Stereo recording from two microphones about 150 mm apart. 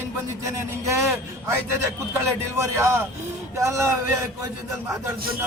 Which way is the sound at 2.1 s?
20° right (ahead or behind).